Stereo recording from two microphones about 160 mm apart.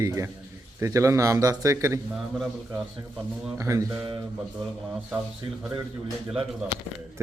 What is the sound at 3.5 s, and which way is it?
Speech, 20° right (ahead or behind).